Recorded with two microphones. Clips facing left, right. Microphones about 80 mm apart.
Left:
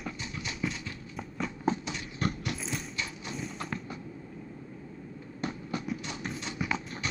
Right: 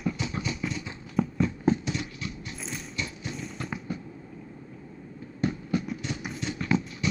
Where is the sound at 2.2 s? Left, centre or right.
Left.